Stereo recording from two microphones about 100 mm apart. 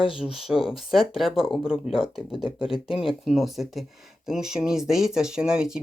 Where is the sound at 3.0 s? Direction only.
5° right (ahead or behind).